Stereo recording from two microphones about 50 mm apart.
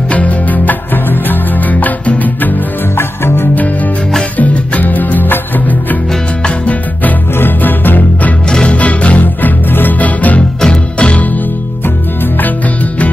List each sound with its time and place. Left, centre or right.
0.1 s music: left
3.0 s music: left
4.4 s music: left
6.4 s music: left
7.3 s music: left
8.5 s music: centre
8.7 s music: left
10.6 s music: centre